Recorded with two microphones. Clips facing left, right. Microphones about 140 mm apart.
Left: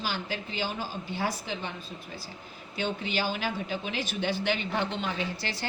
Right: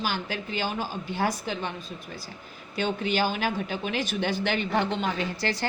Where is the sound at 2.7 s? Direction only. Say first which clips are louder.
Right 4 dB; 50° right (ahead or behind).